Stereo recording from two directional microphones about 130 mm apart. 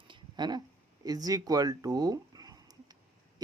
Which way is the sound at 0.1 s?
35° right (ahead or behind).